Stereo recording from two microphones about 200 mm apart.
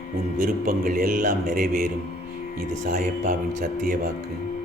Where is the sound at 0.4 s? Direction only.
40° right (ahead or behind).